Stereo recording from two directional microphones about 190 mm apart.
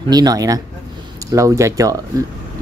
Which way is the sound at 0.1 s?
20° right (ahead or behind).